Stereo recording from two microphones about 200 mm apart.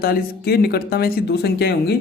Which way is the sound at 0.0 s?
50° left (ahead or behind).